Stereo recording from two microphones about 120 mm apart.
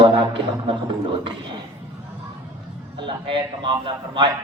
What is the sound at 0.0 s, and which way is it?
Speech, 40° right (ahead or behind).